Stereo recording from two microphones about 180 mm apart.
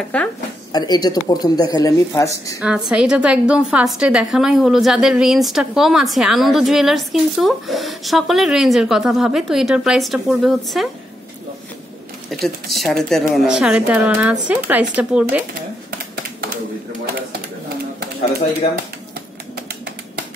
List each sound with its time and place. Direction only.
0.1 s speech: 5° left (ahead or behind)
0.7 s speech: 20° left (ahead or behind)
2.6 s a woman's voice: 5° right (ahead or behind)
12.3 s a sound: centre (ahead or behind)
12.7 s a woman's voice: centre (ahead or behind)